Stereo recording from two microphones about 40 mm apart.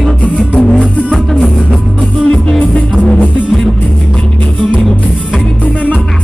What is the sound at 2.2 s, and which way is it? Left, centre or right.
Music, left.